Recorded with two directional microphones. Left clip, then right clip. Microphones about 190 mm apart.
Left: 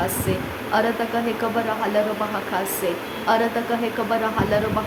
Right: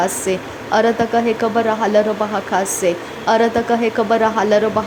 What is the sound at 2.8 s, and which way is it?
Speech, 30° right (ahead or behind).